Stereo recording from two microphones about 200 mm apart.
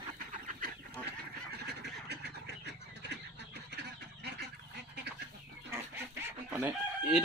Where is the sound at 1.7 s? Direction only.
55° right (ahead or behind).